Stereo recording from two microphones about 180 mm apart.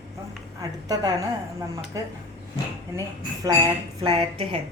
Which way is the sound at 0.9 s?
20° right (ahead or behind).